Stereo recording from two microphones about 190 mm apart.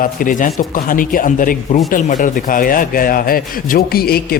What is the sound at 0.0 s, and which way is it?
A man's voice, 45° left (ahead or behind).